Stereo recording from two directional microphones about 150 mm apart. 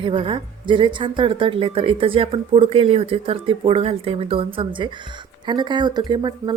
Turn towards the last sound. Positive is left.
turn(degrees=-30)  # may be behind; listen again after turning